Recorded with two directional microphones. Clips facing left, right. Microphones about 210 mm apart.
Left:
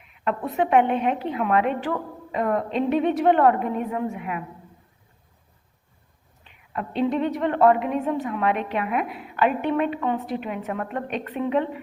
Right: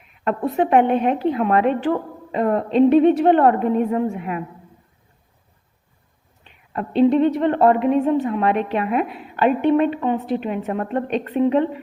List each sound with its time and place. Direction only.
0.3 s a woman's voice: 35° right (ahead or behind)
6.7 s a woman's voice: 30° right (ahead or behind)